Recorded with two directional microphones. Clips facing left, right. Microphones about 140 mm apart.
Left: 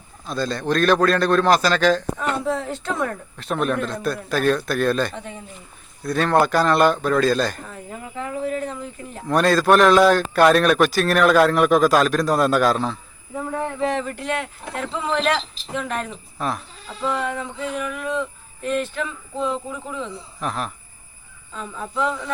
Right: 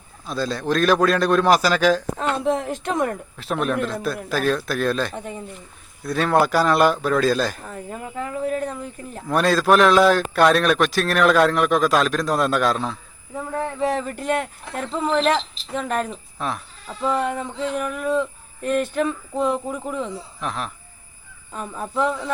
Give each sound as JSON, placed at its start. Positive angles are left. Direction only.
{"t": 0.3, "sound": "a man's voice", "side_deg": -5}
{"t": 2.1, "sound": "speech", "side_deg": -20}
{"t": 3.3, "sound": "a man's voice", "side_deg": 0}
{"t": 8.4, "sound": "speech", "side_deg": -45}
{"t": 9.2, "sound": "a man's voice", "side_deg": 0}
{"t": 13.8, "sound": "speech", "side_deg": -40}
{"t": 16.4, "sound": "a man's voice", "side_deg": 0}
{"t": 17.1, "sound": "a sound", "side_deg": -40}
{"t": 20.4, "sound": "a man's voice", "side_deg": 0}
{"t": 21.5, "sound": "a sound", "side_deg": -50}